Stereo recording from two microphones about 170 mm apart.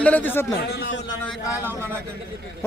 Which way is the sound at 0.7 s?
75° left (ahead or behind).